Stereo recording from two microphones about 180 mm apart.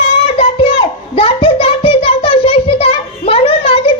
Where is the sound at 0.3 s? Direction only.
35° left (ahead or behind).